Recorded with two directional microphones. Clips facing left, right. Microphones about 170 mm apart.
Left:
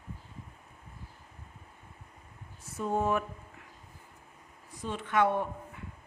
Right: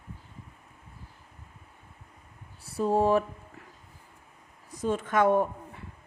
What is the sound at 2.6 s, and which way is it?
Speech, 35° right (ahead or behind).